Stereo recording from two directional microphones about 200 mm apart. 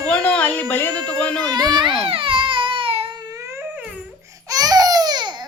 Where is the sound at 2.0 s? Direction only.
25° right (ahead or behind).